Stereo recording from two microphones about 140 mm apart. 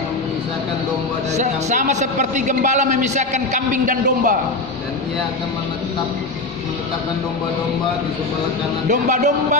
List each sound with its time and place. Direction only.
1.3 s a man's voice: 60° right (ahead or behind)
8.8 s a man's voice: 60° right (ahead or behind)